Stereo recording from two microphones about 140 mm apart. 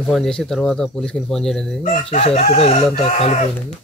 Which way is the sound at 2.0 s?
45° left (ahead or behind).